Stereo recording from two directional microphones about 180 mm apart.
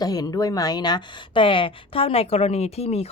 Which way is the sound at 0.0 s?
20° left (ahead or behind).